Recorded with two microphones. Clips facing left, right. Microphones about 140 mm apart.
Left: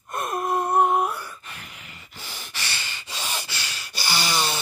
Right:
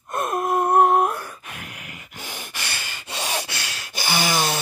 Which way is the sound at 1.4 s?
65° right (ahead or behind).